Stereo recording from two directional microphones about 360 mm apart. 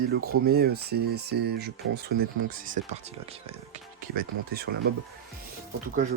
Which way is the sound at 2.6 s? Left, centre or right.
Right.